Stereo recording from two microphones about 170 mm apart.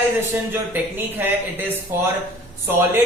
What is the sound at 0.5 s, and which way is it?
A man's voice, 10° right (ahead or behind).